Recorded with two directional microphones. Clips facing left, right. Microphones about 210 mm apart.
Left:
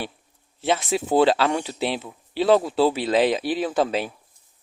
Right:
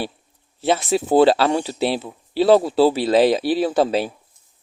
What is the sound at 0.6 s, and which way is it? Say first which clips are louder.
Speech: right 4 dB; 40° right (ahead or behind).